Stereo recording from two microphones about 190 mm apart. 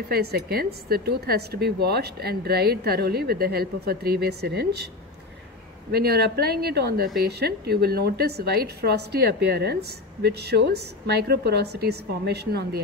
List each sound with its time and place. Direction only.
0.1 s a woman's voice: 55° right (ahead or behind)
5.9 s a woman's voice: 55° right (ahead or behind)